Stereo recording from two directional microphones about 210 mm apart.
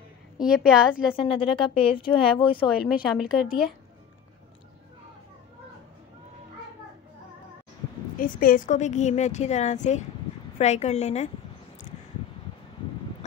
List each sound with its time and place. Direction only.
0.4 s a woman's voice: 5° right (ahead or behind)
1.1 s speech: 25° left (ahead or behind)
2.9 s a woman's voice: 5° right (ahead or behind)
8.2 s a woman's voice: 40° left (ahead or behind)